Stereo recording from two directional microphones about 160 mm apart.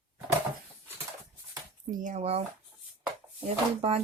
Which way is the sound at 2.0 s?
45° right (ahead or behind).